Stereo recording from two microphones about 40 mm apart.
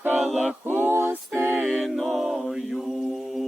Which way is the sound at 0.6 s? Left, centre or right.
Right.